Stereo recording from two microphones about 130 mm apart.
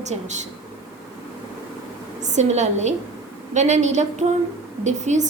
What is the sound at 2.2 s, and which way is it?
A woman's voice, 65° right (ahead or behind).